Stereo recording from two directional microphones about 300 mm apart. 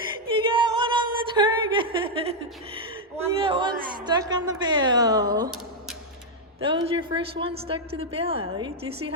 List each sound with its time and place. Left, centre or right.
0.4 s a sound: centre
3.2 s speech: centre
6.6 s a woman's voice: centre